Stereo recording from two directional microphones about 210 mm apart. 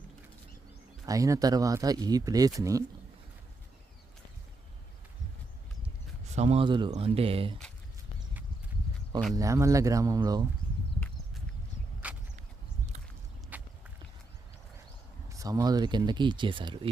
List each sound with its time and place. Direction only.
1.0 s speech: 15° right (ahead or behind)
6.3 s speech: 30° right (ahead or behind)
9.3 s speech: 15° right (ahead or behind)
12.0 s a sound: 5° right (ahead or behind)
13.5 s walk: 10° right (ahead or behind)
15.3 s speech: 15° right (ahead or behind)